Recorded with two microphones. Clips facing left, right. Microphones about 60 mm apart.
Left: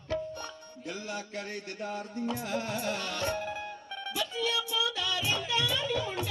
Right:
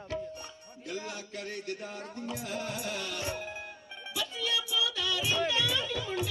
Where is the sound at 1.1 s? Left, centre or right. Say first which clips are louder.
Left 2 dB; left.